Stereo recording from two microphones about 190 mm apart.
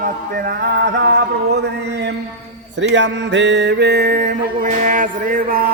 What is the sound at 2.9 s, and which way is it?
Mantra, 70° right (ahead or behind).